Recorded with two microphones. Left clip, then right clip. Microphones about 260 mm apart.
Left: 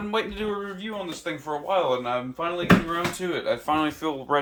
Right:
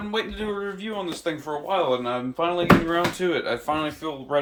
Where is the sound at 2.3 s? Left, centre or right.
Centre.